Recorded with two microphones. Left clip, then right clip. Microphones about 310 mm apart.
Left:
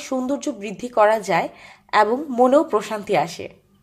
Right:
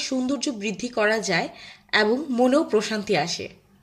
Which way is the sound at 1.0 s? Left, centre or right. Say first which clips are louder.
Left 6 dB; centre.